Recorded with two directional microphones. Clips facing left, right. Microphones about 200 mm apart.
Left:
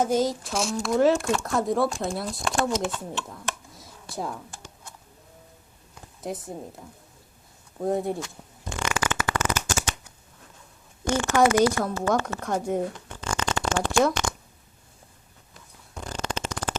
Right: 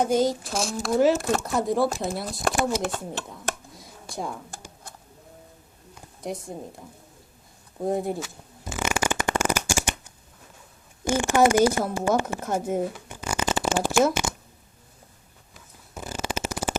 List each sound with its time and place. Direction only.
0.0 s speech: centre (ahead or behind)
2.8 s speech: 40° right (ahead or behind)
3.2 s a sound: centre (ahead or behind)
6.2 s speech: centre (ahead or behind)
7.8 s shuffling cards: centre (ahead or behind)
11.0 s speech: 10° right (ahead or behind)
11.5 s a woman's voice: 25° right (ahead or behind)
11.9 s speech: 15° right (ahead or behind)
15.5 s a sound: 5° right (ahead or behind)